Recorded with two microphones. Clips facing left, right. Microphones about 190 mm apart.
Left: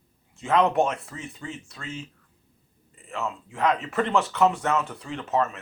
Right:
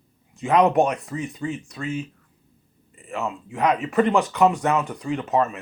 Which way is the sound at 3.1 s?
15° right (ahead or behind).